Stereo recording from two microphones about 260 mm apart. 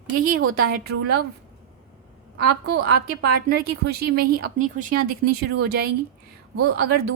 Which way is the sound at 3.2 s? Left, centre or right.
Right.